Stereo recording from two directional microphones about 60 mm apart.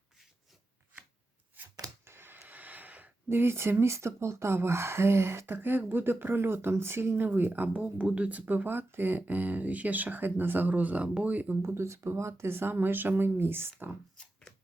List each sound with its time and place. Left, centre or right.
2.0 s a sound: right
3.2 s speech: right
11.6 s speech: right